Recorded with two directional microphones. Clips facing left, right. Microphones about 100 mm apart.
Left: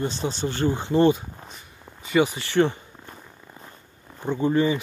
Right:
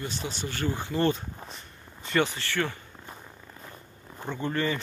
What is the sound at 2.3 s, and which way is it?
Speech, 20° left (ahead or behind).